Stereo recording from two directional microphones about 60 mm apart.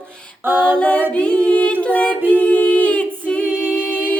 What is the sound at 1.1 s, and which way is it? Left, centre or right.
A capella, centre.